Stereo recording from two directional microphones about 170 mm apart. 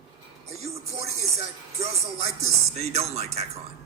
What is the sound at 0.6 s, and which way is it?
Speech, 40° right (ahead or behind).